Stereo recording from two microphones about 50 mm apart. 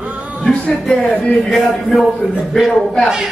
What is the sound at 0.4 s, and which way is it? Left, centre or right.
Music, left.